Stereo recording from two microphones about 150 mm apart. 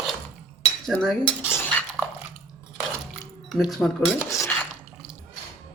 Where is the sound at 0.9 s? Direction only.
5° left (ahead or behind).